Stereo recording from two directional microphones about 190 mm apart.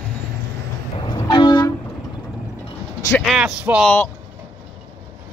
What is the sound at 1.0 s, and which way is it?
Vehicle, 25° left (ahead or behind).